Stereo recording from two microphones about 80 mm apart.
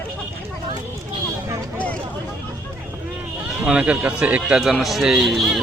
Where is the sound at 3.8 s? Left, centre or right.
Centre.